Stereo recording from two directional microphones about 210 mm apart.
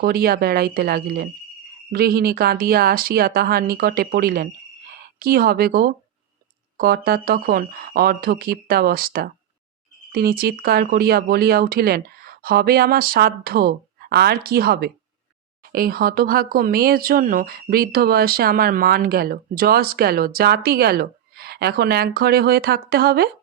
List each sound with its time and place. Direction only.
0.0 s speech: 45° right (ahead or behind)